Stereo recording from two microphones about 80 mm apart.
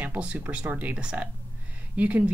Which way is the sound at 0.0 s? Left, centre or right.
Centre.